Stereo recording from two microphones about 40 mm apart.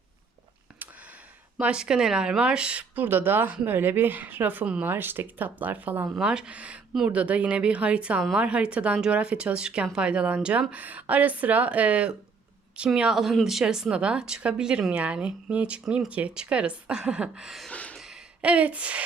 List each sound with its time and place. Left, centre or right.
0.8 s a sound: right
1.5 s speech: right
2.9 s speech: right
6.1 s speech: centre
6.5 s speech: right
13.4 s speech: centre
13.9 s speech: right
17.4 s a sound: centre
17.7 s a sound: left
18.4 s speech: right